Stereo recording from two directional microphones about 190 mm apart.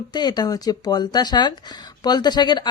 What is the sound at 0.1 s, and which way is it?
A woman's voice, 20° left (ahead or behind).